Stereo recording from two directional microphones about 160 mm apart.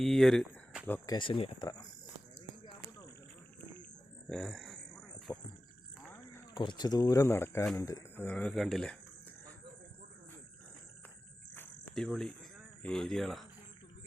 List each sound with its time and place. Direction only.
0.0 s speech: 5° left (ahead or behind)
1.0 s speech: 30° left (ahead or behind)
4.3 s a sound: centre (ahead or behind)
5.3 s speech: 20° left (ahead or behind)
6.1 s a sound: 15° left (ahead or behind)
6.6 s speech: 25° left (ahead or behind); by 9.0 s 5° left (ahead or behind)
11.5 s cricket: 10° left (ahead or behind)